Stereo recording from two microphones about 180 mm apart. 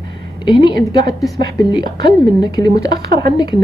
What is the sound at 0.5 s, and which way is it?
A woman's voice, 25° left (ahead or behind).